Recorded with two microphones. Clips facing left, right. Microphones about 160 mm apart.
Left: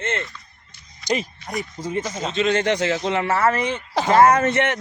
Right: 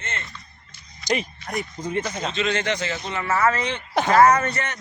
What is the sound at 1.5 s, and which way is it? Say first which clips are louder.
Speech: even; 20° left (ahead or behind).